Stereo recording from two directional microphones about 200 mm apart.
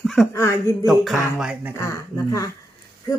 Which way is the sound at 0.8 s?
Centre (ahead or behind).